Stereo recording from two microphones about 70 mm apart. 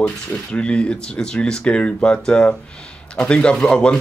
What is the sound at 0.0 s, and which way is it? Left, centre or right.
Speech, centre.